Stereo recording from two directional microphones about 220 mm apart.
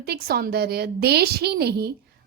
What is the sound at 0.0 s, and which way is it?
A woman's voice, 45° right (ahead or behind).